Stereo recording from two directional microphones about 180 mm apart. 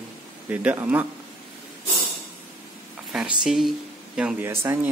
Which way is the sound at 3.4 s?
Centre (ahead or behind).